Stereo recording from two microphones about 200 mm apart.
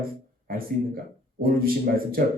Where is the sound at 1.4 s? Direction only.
45° right (ahead or behind).